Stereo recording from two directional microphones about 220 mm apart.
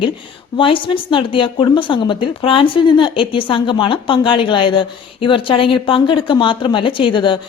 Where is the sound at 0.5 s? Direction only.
25° left (ahead or behind).